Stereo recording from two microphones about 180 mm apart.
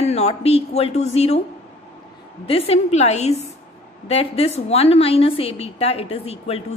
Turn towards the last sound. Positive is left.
turn(degrees=35)  # may be behind; listen again after turning